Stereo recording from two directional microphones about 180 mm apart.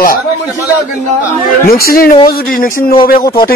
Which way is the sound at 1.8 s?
55° left (ahead or behind).